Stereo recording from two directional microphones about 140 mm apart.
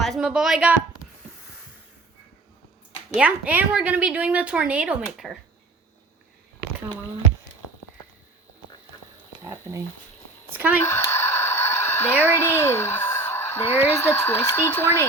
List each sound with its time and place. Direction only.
0.0 s speech: centre (ahead or behind)
3.2 s a woman's voice: 10° right (ahead or behind)
9.4 s a sound: 20° right (ahead or behind)
10.5 s a woman's voice: 10° right (ahead or behind)
10.8 s speech: 20° left (ahead or behind)